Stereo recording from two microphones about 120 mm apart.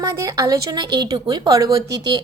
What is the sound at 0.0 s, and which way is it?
A woman's voice, 25° right (ahead or behind).